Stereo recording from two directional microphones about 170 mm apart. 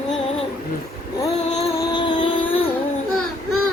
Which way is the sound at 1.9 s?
25° left (ahead or behind).